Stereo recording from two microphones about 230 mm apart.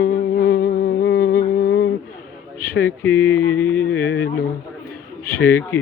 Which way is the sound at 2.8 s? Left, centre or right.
Centre.